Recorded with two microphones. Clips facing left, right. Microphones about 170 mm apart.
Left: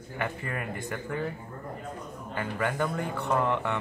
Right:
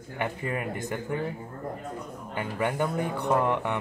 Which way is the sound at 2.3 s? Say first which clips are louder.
Right 1 dB; 20° right (ahead or behind).